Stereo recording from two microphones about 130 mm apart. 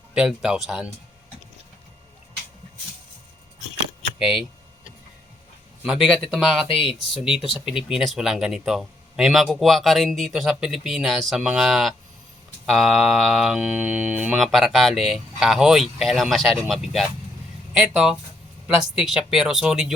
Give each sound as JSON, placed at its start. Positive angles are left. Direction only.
{"t": 0.1, "sound": "speech", "side_deg": -5}
{"t": 4.2, "sound": "speech", "side_deg": 0}
{"t": 5.8, "sound": "speech", "side_deg": -5}